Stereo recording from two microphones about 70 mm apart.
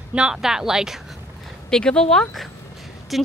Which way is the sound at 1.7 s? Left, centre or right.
Centre.